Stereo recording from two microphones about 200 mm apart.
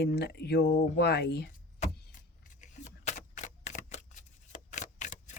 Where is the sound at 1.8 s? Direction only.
35° left (ahead or behind).